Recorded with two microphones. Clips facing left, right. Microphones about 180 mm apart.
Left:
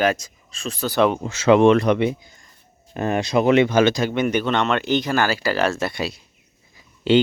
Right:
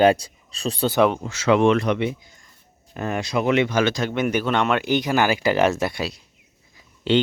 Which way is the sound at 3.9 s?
Centre (ahead or behind).